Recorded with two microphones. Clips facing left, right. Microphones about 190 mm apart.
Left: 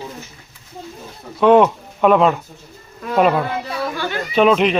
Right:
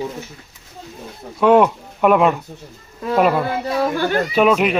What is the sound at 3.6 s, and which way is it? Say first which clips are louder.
Speech: right 5 dB; 45° right (ahead or behind).